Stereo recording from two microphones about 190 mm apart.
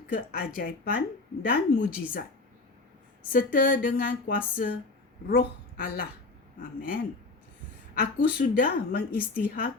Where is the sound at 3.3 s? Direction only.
50° left (ahead or behind).